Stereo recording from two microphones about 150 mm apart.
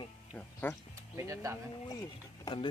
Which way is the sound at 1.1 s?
20° right (ahead or behind).